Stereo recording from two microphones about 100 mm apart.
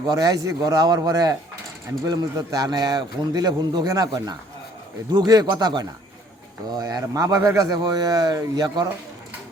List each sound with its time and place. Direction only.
0.1 s a man's voice: 35° right (ahead or behind)